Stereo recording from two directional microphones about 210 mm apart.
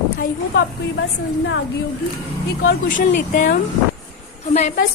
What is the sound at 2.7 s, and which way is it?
Speech, 40° left (ahead or behind).